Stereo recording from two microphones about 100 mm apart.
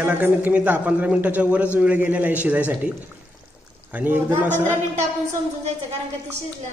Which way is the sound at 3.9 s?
20° right (ahead or behind).